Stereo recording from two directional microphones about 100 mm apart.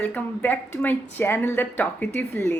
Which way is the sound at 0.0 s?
20° left (ahead or behind).